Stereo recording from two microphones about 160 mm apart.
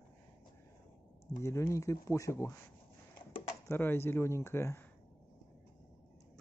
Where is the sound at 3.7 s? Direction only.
15° left (ahead or behind).